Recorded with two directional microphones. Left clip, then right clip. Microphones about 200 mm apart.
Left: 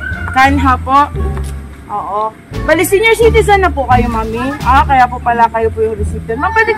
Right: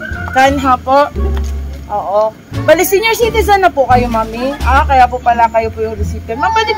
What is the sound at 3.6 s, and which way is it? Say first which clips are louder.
Speech: right 2 dB; 45° right (ahead or behind).